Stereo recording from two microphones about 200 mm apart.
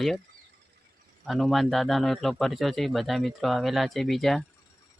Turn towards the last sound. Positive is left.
turn(degrees=0)  # may be behind; listen again after turning